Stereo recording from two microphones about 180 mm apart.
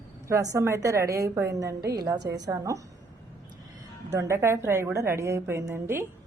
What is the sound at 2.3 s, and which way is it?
Speech, 20° right (ahead or behind).